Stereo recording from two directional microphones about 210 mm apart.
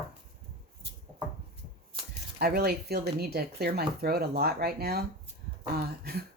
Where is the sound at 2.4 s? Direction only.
50° right (ahead or behind).